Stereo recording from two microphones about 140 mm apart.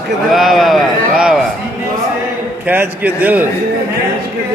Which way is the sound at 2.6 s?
15° right (ahead or behind).